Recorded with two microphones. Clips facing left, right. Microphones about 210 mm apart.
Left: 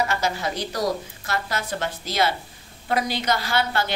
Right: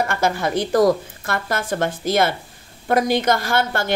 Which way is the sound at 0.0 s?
55° right (ahead or behind).